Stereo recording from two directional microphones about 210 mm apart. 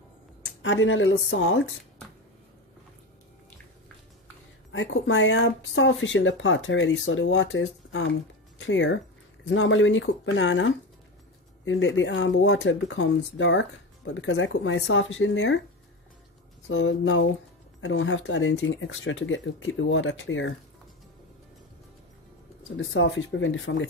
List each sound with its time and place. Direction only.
0.6 s speech: 65° left (ahead or behind)
4.6 s speech: 65° left (ahead or behind)
16.6 s speech: 65° left (ahead or behind)
22.8 s speech: 65° left (ahead or behind)